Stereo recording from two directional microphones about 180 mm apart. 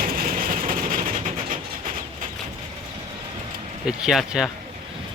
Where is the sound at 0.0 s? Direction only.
55° right (ahead or behind).